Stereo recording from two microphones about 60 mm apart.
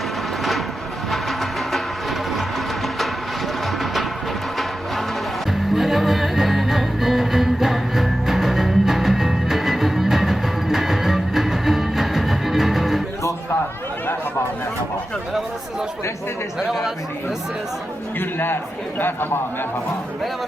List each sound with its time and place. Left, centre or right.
1.1 s music: centre
3.7 s music: centre
5.5 s music: centre
16.6 s a sound: centre
18.2 s chatter: left
18.9 s a man's voice: left